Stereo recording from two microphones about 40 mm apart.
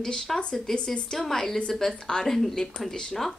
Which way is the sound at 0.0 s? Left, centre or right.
Centre.